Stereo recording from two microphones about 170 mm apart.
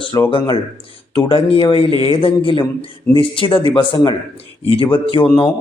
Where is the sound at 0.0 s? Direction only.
30° left (ahead or behind).